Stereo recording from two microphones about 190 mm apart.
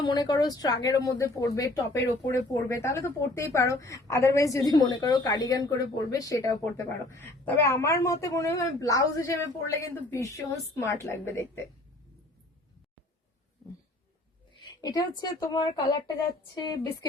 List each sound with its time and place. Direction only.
0.0 s speech: 20° left (ahead or behind)
14.6 s a sound: 20° left (ahead or behind)
15.2 s speech: 20° left (ahead or behind)